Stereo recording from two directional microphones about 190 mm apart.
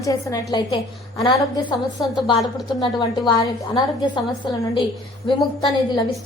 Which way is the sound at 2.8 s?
20° left (ahead or behind).